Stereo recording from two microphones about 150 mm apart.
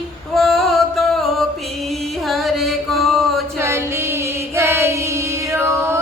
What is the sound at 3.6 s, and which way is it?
Music, 15° right (ahead or behind).